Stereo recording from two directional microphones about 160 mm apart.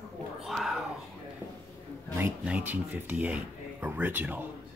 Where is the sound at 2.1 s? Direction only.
10° right (ahead or behind).